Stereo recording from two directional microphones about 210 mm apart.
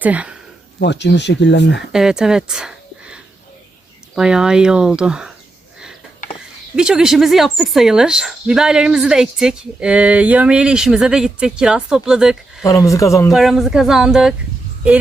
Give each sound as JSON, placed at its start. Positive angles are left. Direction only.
{"t": 0.0, "sound": "speech", "side_deg": -5}
{"t": 0.8, "sound": "speech", "side_deg": 55}
{"t": 1.9, "sound": "speech", "side_deg": -5}
{"t": 6.7, "sound": "speech", "side_deg": -5}
{"t": 12.6, "sound": "speech", "side_deg": 15}
{"t": 13.3, "sound": "speech", "side_deg": 0}